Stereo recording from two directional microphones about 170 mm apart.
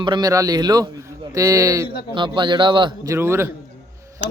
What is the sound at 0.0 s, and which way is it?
A man's voice, 25° right (ahead or behind).